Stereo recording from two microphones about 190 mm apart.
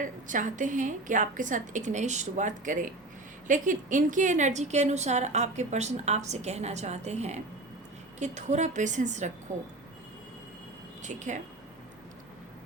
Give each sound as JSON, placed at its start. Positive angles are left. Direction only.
{"t": 0.0, "sound": "a woman's voice", "side_deg": -45}
{"t": 11.0, "sound": "a woman's voice", "side_deg": -40}